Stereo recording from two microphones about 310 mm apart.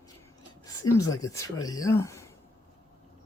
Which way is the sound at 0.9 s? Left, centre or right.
Centre.